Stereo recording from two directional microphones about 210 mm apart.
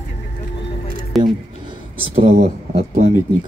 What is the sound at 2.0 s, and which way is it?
Speech, 30° right (ahead or behind).